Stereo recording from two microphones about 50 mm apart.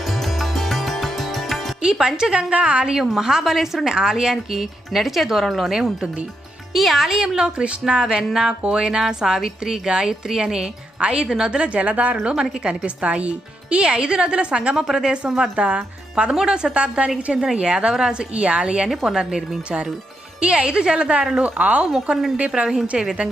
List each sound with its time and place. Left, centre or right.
0.0 s music: centre
1.8 s a woman's voice: centre
2.5 s a woman's voice: right
2.8 s a woman's voice: centre
5.7 s a woman's voice: centre
7.6 s a woman's voice: right
12.1 s a woman's voice: centre
12.4 s a woman's voice: right
18.9 s a woman's voice: centre
20.4 s a woman's voice: right